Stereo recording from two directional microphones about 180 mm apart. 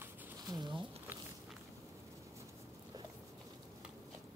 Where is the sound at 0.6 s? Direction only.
25° right (ahead or behind).